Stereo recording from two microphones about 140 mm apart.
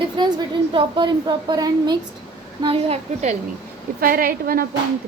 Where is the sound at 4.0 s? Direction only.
90° right.